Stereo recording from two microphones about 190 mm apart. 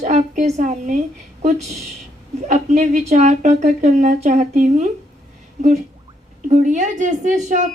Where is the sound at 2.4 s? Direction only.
40° right (ahead or behind).